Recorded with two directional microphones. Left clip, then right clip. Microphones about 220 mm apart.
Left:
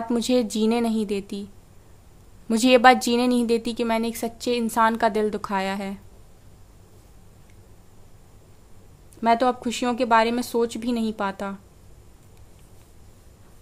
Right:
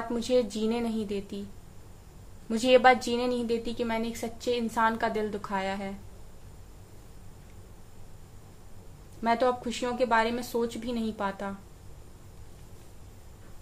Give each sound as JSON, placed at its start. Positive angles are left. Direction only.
{"t": 0.1, "sound": "a woman's voice", "side_deg": 50}
{"t": 2.4, "sound": "a woman's voice", "side_deg": 50}
{"t": 9.2, "sound": "a woman's voice", "side_deg": 50}